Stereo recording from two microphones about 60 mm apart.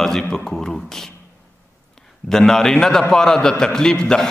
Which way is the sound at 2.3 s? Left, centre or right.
Centre.